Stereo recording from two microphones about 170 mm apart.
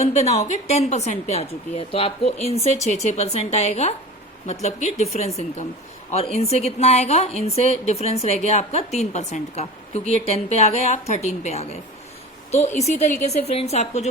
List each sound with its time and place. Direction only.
0.0 s a woman's voice: 40° left (ahead or behind)